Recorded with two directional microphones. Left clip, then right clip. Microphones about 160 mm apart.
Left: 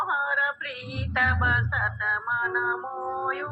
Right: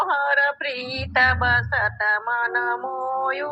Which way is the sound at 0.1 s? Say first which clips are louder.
Right 5 dB; 45° right (ahead or behind).